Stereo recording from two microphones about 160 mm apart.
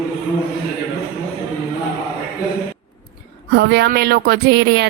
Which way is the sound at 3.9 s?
75° right (ahead or behind).